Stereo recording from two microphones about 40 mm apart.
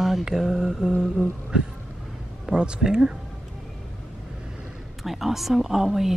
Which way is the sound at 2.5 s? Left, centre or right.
Right.